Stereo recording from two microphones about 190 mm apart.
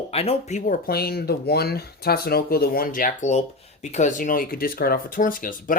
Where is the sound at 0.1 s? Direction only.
30° left (ahead or behind).